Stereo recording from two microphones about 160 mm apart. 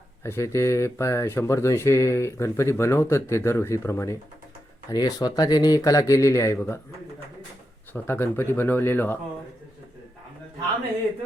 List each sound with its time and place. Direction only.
0.2 s speech: 15° left (ahead or behind)
7.9 s speech: 15° left (ahead or behind)